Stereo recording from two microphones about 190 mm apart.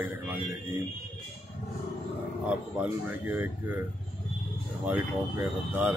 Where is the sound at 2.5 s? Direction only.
5° right (ahead or behind).